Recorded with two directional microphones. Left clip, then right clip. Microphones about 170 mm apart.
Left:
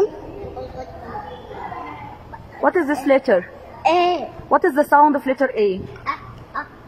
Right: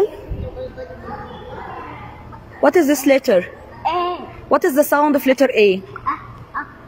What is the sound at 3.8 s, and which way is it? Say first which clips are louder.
Babbling: left 4 dB; 20° left (ahead or behind).